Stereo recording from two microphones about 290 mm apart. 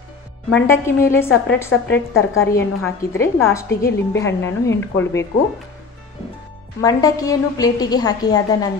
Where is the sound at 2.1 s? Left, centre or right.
Left.